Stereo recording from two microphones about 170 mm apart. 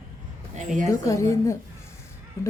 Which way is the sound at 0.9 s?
20° left (ahead or behind).